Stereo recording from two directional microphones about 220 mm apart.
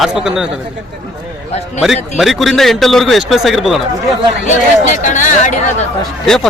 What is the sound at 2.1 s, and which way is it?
A man's voice, centre (ahead or behind).